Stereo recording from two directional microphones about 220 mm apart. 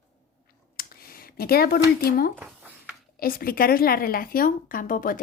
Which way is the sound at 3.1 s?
40° left (ahead or behind).